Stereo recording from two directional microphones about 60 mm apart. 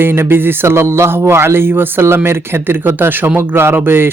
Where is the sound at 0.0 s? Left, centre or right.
Right.